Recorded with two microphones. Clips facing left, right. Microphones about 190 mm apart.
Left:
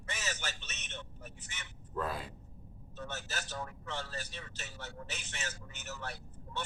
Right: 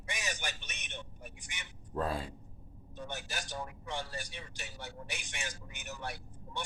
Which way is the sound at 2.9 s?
15° right (ahead or behind).